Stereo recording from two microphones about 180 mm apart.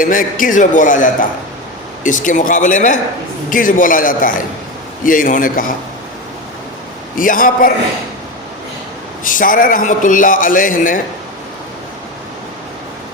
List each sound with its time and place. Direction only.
0.0 s a man's voice: 50° left (ahead or behind)
7.2 s a man's voice: 50° left (ahead or behind)
9.2 s a man's voice: 50° left (ahead or behind)